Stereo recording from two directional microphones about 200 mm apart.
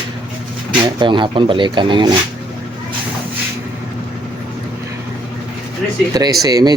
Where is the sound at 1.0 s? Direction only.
25° right (ahead or behind).